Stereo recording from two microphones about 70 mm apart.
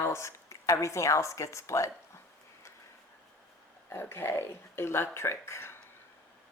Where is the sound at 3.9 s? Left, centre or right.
Left.